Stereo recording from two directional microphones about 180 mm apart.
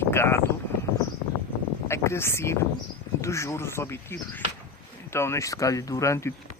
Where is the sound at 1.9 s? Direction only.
15° left (ahead or behind).